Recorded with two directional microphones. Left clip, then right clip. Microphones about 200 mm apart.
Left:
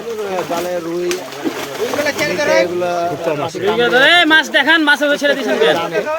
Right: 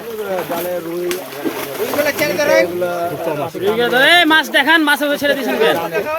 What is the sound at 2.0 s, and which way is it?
Speech, 35° right (ahead or behind).